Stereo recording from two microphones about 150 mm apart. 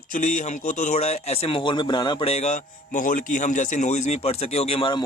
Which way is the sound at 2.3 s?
50° left (ahead or behind).